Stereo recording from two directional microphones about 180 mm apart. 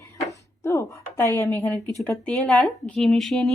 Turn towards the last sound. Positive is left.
turn(degrees=0)  # may be behind; listen again after turning